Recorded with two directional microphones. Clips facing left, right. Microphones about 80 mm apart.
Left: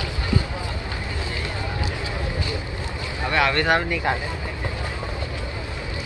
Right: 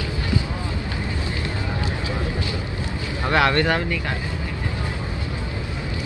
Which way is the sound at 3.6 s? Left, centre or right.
Centre.